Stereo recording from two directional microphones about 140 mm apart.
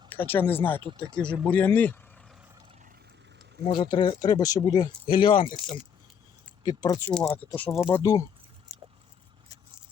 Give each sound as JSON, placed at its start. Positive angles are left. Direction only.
{"t": 0.1, "sound": "speech", "side_deg": 15}
{"t": 3.6, "sound": "speech", "side_deg": 35}
{"t": 6.6, "sound": "speech", "side_deg": 30}
{"t": 7.1, "sound": "speech", "side_deg": 10}
{"t": 7.9, "sound": "speech", "side_deg": 20}